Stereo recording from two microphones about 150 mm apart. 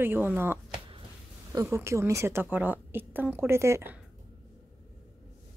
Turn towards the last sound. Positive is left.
turn(degrees=-15)  # may be behind; listen again after turning